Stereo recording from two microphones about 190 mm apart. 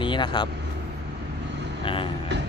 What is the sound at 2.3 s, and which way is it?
Music, 65° right (ahead or behind).